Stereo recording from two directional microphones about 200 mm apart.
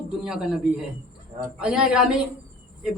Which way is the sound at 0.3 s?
5° right (ahead or behind).